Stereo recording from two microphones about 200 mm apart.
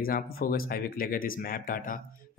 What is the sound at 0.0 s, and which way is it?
Speech, 45° left (ahead or behind).